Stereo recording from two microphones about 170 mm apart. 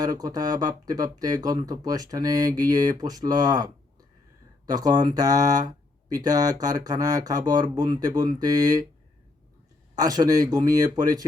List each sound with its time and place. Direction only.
0.0 s speech: 20° right (ahead or behind)
9.9 s speech: 20° right (ahead or behind)